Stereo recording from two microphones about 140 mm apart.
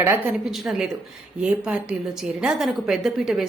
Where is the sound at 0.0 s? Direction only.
10° right (ahead or behind).